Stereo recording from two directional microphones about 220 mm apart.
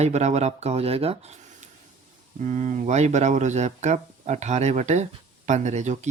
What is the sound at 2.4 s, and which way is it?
Speech, 35° right (ahead or behind).